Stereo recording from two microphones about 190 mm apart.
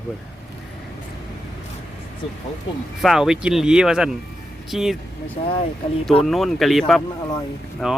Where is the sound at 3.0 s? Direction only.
Centre (ahead or behind).